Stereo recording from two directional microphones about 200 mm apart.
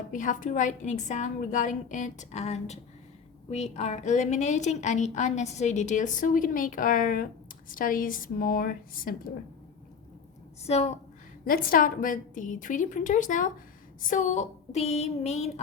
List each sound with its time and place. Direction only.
0.1 s a woman's voice: 40° left (ahead or behind)
10.6 s a woman's voice: 35° left (ahead or behind)
11.4 s a woman's voice: 45° left (ahead or behind)